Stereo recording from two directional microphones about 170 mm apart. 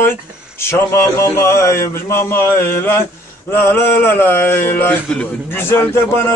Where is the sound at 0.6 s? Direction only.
15° left (ahead or behind).